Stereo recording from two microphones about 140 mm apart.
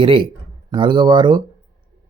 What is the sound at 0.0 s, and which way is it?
Speech, 35° right (ahead or behind).